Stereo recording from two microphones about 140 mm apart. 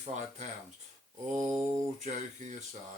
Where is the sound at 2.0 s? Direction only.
60° right (ahead or behind).